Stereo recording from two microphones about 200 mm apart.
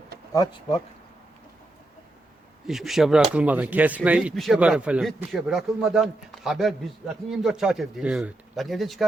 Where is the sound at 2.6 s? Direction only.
Centre (ahead or behind).